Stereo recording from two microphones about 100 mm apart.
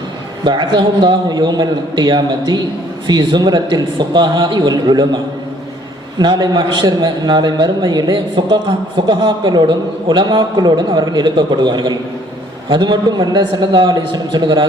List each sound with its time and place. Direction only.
0.4 s a man's voice: 50° right (ahead or behind)